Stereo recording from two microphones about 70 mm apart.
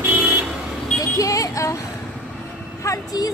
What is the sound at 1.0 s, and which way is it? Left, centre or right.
Speech, left.